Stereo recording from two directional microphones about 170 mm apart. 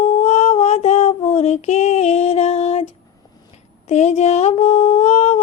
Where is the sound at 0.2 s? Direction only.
40° left (ahead or behind).